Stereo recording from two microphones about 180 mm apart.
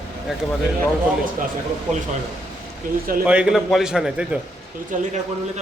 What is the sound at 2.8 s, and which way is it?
Speech, 50° right (ahead or behind).